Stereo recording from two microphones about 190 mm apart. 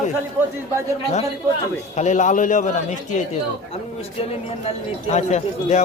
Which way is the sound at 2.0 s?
40° left (ahead or behind).